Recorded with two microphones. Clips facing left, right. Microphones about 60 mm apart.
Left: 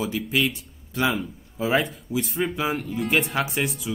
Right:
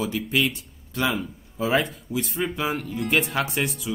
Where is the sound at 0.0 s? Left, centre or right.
Centre.